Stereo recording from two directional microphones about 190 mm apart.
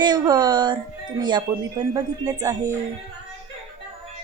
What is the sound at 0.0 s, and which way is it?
Speech, 20° right (ahead or behind).